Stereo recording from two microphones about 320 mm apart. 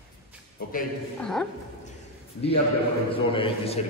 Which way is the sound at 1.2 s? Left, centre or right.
Centre.